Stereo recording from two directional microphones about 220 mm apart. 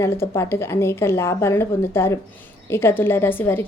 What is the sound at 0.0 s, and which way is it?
A woman's voice, 10° left (ahead or behind).